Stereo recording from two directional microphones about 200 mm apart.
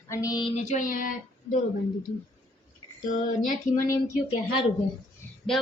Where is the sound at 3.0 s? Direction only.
40° left (ahead or behind).